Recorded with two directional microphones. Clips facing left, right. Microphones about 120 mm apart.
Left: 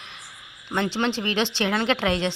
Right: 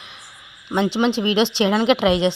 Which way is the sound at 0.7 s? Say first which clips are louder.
Right 6 dB; 15° right (ahead or behind).